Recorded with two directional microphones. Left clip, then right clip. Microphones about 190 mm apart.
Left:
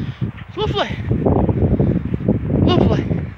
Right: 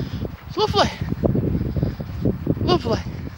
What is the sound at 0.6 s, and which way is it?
Speech, 15° right (ahead or behind).